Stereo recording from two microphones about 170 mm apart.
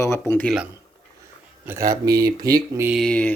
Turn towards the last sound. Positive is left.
turn(degrees=5)  # may be behind; listen again after turning